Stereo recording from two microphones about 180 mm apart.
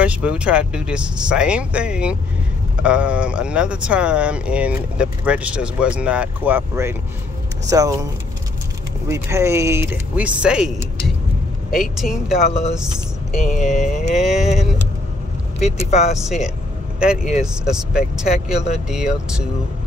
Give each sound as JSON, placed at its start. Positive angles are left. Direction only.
{"t": 0.0, "sound": "speech", "side_deg": -5}
{"t": 9.1, "sound": "speech", "side_deg": -15}
{"t": 11.7, "sound": "speech", "side_deg": 0}
{"t": 13.4, "sound": "speech", "side_deg": 40}
{"t": 14.1, "sound": "speech", "side_deg": 0}
{"t": 15.6, "sound": "speech", "side_deg": 40}
{"t": 16.2, "sound": "speech", "side_deg": 0}